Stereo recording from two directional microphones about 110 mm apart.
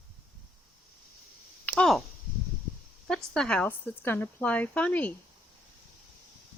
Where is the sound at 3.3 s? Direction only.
5° left (ahead or behind).